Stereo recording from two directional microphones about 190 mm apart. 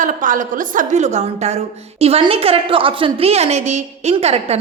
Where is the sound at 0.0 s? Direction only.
40° right (ahead or behind).